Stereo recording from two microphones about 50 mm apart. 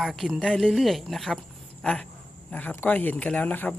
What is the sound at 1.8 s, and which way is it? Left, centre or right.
Speech, left.